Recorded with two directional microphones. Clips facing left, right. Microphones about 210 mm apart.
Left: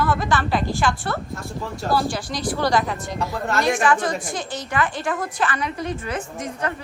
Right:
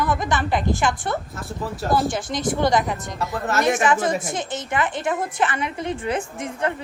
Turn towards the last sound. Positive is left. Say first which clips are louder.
# right 2 dB
turn(degrees=-25)  # may be behind; listen again after turning